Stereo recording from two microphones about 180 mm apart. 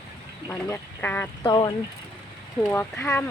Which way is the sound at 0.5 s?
10° left (ahead or behind).